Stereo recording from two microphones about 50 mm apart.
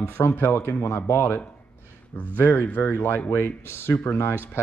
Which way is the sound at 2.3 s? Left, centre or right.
Left.